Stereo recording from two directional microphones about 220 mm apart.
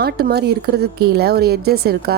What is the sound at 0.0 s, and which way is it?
A woman's voice, 45° right (ahead or behind).